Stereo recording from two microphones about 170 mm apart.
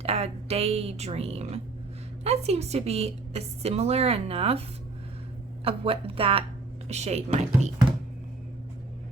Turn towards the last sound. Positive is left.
turn(degrees=-40)  # may be behind; listen again after turning